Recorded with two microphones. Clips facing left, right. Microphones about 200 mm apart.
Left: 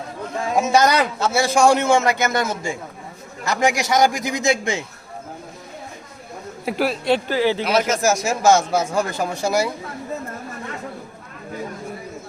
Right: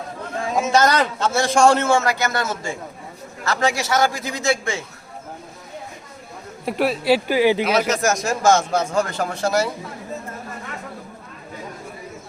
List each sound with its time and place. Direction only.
0.5 s a man's voice: 10° left (ahead or behind)
6.7 s speech: centre (ahead or behind)
7.6 s a man's voice: centre (ahead or behind)